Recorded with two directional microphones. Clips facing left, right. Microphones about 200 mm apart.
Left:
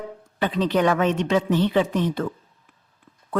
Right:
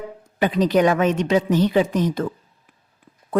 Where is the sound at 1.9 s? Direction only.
40° right (ahead or behind).